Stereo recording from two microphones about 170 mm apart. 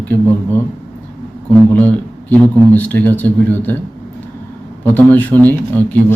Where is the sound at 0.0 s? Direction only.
10° left (ahead or behind).